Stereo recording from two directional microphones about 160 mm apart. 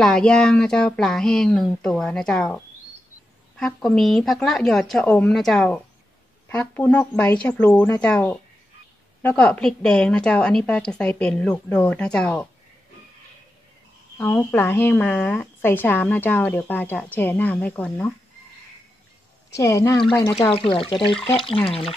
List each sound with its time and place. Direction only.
0.0 s speech: 5° left (ahead or behind)
3.5 s a woman's voice: centre (ahead or behind)
14.1 s a woman's voice: 10° left (ahead or behind)
19.5 s a woman's voice: 20° left (ahead or behind)
20.7 s speech: 35° left (ahead or behind)